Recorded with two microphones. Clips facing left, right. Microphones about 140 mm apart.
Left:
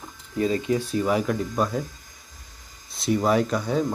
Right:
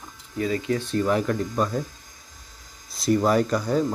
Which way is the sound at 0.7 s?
10° left (ahead or behind).